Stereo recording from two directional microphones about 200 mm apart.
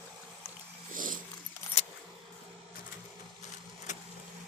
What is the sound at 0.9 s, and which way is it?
Dog, 40° right (ahead or behind).